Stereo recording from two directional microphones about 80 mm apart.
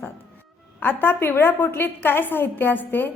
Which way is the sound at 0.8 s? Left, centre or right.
Left.